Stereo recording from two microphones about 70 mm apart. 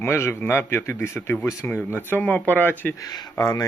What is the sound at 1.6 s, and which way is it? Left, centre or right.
Speech, left.